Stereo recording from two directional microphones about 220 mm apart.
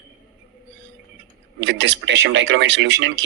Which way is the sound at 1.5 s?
55° right (ahead or behind).